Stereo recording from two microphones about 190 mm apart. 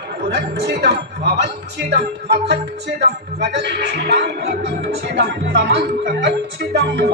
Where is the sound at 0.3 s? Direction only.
60° right (ahead or behind).